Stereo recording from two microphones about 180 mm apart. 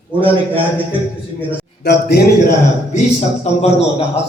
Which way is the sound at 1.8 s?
60° left (ahead or behind).